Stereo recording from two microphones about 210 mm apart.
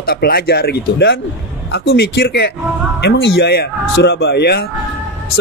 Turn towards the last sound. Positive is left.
turn(degrees=50)  # may be behind; listen again after turning